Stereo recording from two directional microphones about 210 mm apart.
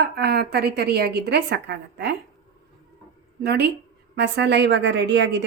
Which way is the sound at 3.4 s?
50° right (ahead or behind).